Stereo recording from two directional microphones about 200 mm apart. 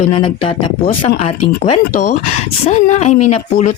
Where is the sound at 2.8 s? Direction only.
35° left (ahead or behind).